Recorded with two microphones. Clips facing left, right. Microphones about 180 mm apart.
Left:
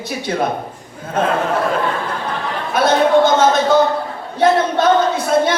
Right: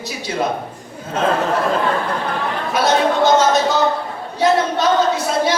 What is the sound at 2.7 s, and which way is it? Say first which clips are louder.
A man's voice: left 4 dB; 55° left (ahead or behind).